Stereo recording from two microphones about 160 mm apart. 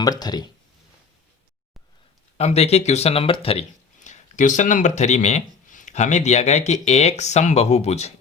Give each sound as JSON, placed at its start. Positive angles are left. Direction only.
{"t": 0.0, "sound": "speech", "side_deg": 25}
{"t": 2.4, "sound": "speech", "side_deg": 40}